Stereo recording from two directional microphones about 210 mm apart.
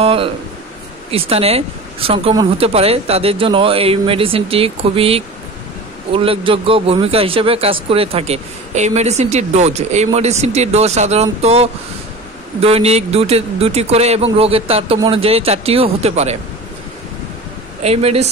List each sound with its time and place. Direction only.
0.0 s speech: 25° right (ahead or behind)
17.8 s speech: 30° right (ahead or behind)